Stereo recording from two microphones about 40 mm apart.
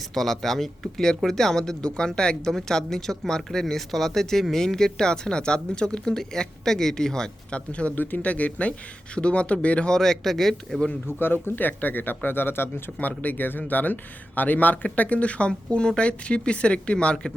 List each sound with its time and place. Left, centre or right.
0.1 s speech: centre
7.5 s speech: left
7.9 s speech: left
8.2 s speech: left
9.9 s speech: centre
11.0 s speech: left
13.0 s speech: left